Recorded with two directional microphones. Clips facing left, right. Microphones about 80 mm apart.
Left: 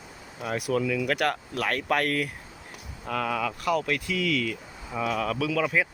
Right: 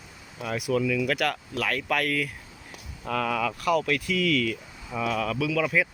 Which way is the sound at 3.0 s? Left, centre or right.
Centre.